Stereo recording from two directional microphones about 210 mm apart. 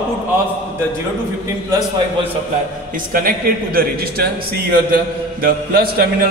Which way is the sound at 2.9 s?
45° right (ahead or behind).